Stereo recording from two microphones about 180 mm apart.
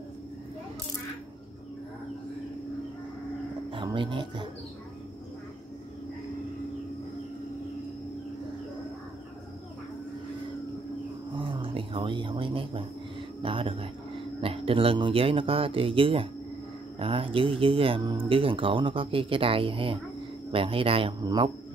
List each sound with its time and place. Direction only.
3.7 s speech: 25° right (ahead or behind)
11.3 s a sound: 30° right (ahead or behind)
13.4 s speech: 30° right (ahead or behind)